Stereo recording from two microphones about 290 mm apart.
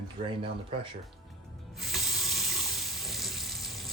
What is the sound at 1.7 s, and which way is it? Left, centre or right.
Sink, centre.